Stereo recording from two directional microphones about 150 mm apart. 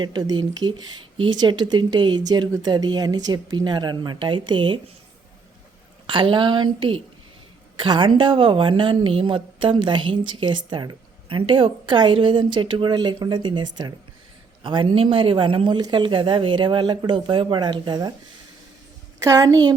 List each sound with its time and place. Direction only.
0.0 s speech: 30° right (ahead or behind)
6.1 s speech: 35° right (ahead or behind)
19.2 s speech: 25° right (ahead or behind)